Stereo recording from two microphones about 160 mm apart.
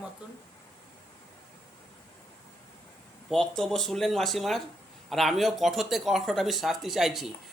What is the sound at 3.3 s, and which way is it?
Speech, 5° left (ahead or behind).